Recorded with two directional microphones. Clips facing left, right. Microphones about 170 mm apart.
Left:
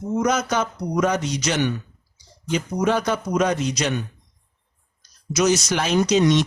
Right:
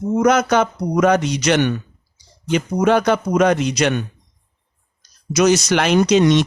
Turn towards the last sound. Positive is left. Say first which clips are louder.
# right 4 dB
turn(degrees=-65)  # may be behind; listen again after turning